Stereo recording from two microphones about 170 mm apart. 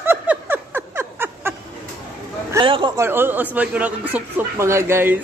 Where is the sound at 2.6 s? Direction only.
30° right (ahead or behind).